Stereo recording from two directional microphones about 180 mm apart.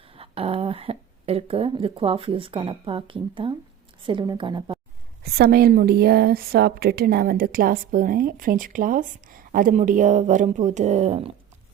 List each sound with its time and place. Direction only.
0.1 s a woman's voice: 30° right (ahead or behind)
5.2 s a woman's voice: 55° right (ahead or behind); by 11.3 s 35° right (ahead or behind)